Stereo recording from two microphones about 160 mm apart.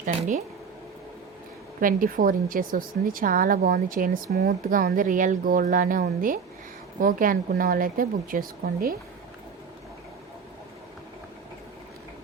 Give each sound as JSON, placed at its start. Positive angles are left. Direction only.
{"t": 0.0, "sound": "speech", "side_deg": -50}
{"t": 1.8, "sound": "speech", "side_deg": -60}